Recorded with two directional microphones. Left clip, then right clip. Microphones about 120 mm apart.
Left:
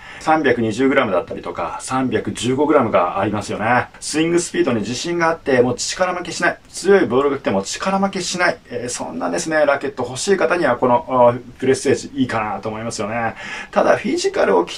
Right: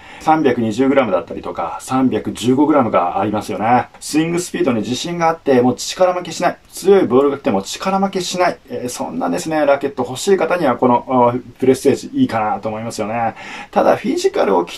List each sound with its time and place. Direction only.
0.2 s speech: 30° right (ahead or behind)